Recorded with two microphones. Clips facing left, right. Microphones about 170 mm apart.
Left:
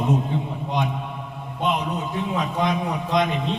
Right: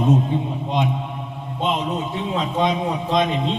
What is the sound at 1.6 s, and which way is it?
A man's voice, 20° right (ahead or behind).